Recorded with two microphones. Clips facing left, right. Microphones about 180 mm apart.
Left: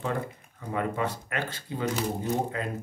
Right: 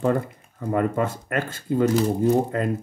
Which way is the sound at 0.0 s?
45° right (ahead or behind).